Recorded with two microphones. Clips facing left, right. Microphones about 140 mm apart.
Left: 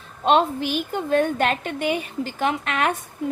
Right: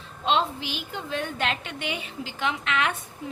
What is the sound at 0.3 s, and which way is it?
A woman's voice, 50° left (ahead or behind).